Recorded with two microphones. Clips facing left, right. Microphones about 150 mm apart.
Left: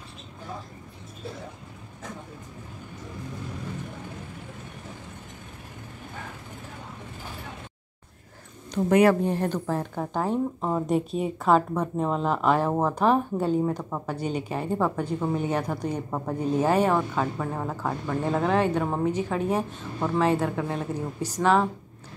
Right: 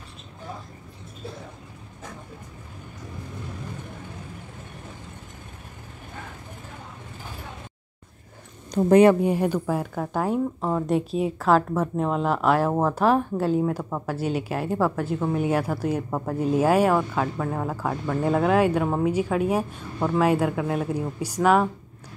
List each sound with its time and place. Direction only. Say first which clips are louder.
8.7 s speech: right 4 dB; 30° right (ahead or behind)
9.2 s speech: right 3 dB; 10° right (ahead or behind)